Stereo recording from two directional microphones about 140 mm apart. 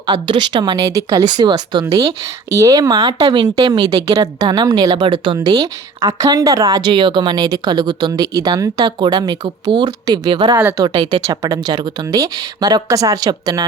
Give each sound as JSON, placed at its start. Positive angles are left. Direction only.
{"t": 0.0, "sound": "speech", "side_deg": -35}
{"t": 10.6, "sound": "speech", "side_deg": -15}
{"t": 10.8, "sound": "speech", "side_deg": -35}